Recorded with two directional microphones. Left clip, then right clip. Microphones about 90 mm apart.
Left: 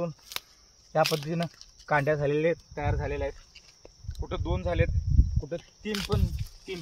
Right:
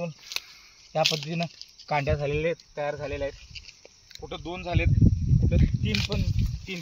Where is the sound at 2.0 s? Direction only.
65° left (ahead or behind).